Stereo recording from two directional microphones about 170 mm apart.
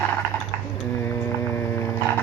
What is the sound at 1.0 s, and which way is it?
Mains hum, 15° left (ahead or behind).